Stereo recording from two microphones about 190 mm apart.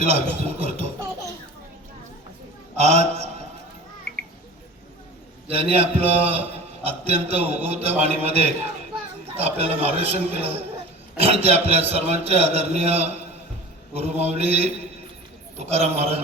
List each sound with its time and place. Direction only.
0.0 s a man's voice: 35° right (ahead or behind)
2.7 s a man's voice: 35° right (ahead or behind)
5.5 s a man's voice: 30° right (ahead or behind)